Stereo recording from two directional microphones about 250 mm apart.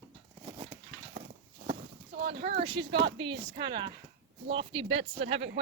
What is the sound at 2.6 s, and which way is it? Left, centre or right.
Speech, right.